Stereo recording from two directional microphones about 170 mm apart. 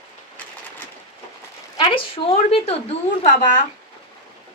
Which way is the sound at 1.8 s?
35° left (ahead or behind).